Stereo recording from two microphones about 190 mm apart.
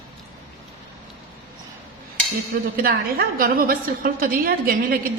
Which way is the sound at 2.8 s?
50° right (ahead or behind).